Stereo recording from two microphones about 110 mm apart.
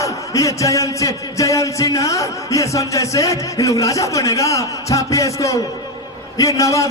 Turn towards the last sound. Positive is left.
turn(degrees=30)  # may be behind; listen again after turning